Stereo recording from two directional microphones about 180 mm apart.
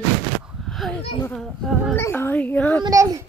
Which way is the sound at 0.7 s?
Centre (ahead or behind).